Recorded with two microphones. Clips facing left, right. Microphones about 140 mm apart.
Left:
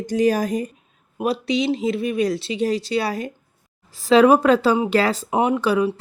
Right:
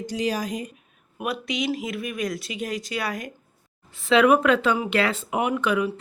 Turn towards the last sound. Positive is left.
turn(degrees=35)  # may be behind; listen again after turning